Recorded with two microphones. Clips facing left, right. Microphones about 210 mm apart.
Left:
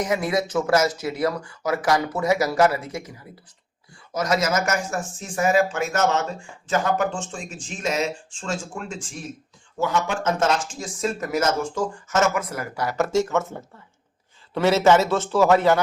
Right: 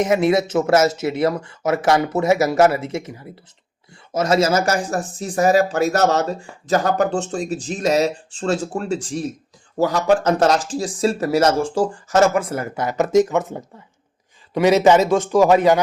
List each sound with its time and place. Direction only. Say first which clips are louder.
0.0 s a man's voice: right 6 dB; 25° right (ahead or behind)